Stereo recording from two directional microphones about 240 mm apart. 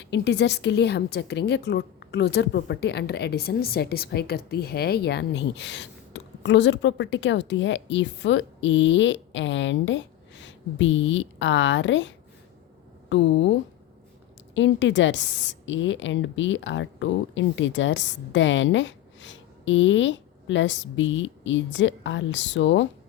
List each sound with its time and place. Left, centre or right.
0.0 s a woman's voice: left
14.5 s a woman's voice: left